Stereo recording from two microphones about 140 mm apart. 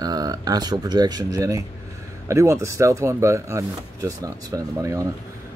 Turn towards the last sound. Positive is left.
turn(degrees=-25)  # may be behind; listen again after turning